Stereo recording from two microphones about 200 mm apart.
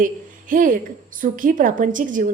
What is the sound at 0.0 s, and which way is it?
A woman's voice, 40° right (ahead or behind).